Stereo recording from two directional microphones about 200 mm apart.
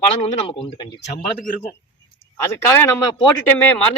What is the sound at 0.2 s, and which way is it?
Speech, 30° left (ahead or behind).